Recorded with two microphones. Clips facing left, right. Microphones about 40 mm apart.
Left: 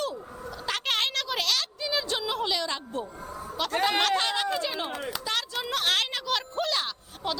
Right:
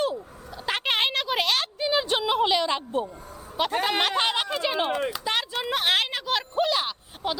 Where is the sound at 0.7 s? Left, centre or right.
Right.